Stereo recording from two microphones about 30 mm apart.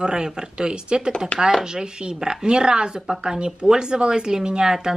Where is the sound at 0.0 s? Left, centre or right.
Right.